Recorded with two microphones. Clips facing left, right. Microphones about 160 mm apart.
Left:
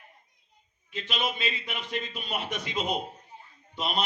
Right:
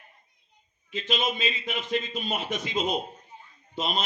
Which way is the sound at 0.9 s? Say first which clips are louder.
Right 3 dB; 60° left (ahead or behind).